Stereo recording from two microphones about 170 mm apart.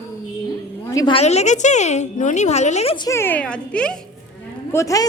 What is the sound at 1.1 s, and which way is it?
A woman's voice, 40° left (ahead or behind).